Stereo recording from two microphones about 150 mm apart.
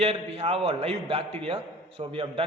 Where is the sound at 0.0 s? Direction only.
40° right (ahead or behind).